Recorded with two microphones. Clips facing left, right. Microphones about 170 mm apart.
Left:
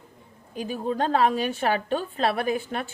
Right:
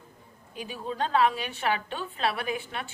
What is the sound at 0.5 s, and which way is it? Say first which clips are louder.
A woman's voice: left 7 dB; 45° left (ahead or behind).